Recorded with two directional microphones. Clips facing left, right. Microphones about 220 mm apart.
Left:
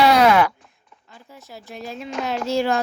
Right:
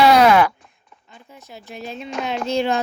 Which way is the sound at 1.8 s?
20° right (ahead or behind).